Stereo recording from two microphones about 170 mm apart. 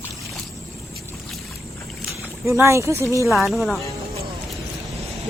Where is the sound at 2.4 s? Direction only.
15° right (ahead or behind).